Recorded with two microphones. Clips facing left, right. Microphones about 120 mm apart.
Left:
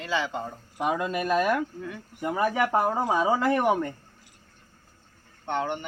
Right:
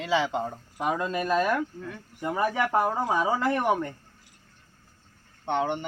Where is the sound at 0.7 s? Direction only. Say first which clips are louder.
Left 1 dB; 15° left (ahead or behind).